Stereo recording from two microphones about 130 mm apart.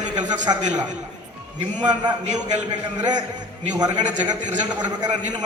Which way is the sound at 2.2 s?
65° right (ahead or behind).